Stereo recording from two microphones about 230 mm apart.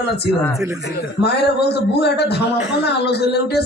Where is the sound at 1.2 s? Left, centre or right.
Left.